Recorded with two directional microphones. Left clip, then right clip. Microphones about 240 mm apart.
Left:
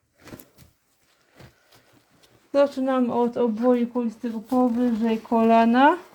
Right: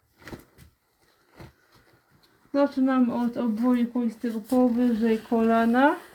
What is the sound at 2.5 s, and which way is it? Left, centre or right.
Speech, left.